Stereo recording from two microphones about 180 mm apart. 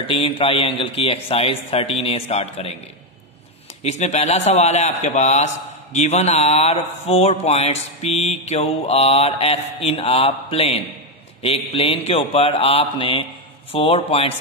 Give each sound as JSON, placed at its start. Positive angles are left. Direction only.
{"t": 0.0, "sound": "speech", "side_deg": 30}
{"t": 3.8, "sound": "speech", "side_deg": 40}